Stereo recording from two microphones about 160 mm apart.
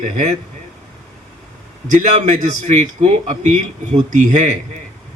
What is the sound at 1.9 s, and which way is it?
A man's voice, 50° right (ahead or behind).